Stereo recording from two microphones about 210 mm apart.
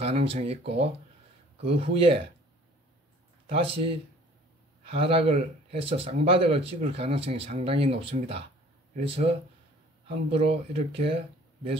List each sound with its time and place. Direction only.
0.0 s speech: 25° right (ahead or behind)
1.6 s speech: 25° right (ahead or behind)
3.5 s speech: 25° right (ahead or behind)